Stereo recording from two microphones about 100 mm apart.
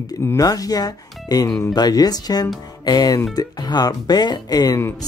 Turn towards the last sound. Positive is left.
turn(degrees=40)  # may be behind; listen again after turning